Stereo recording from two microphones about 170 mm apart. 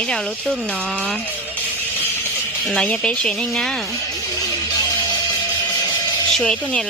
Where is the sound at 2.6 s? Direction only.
5° left (ahead or behind).